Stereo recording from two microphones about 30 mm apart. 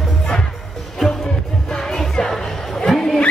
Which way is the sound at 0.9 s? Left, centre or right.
Centre.